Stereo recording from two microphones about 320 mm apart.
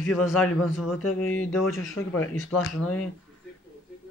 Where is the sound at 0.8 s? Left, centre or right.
Left.